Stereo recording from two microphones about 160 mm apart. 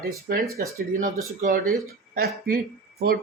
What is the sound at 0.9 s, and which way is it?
Speech, 55° right (ahead or behind).